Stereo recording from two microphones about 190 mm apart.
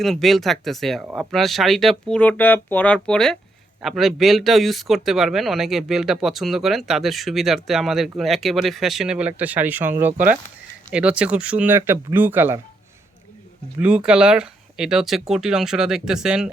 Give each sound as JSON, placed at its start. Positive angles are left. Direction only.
{"t": 0.0, "sound": "speech", "side_deg": 0}
{"t": 13.7, "sound": "speech", "side_deg": -5}